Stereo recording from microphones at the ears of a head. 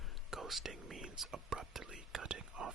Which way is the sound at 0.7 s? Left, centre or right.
Right.